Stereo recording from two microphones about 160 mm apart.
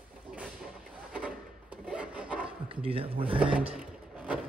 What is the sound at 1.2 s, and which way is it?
Rub, 10° right (ahead or behind).